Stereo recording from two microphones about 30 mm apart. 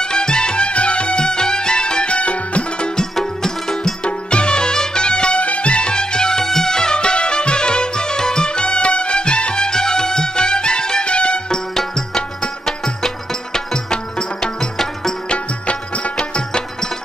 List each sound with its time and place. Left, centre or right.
0.0 s music: left
3.2 s music: centre
4.0 s music: left
5.4 s music: left
12.4 s music: centre
15.2 s music: left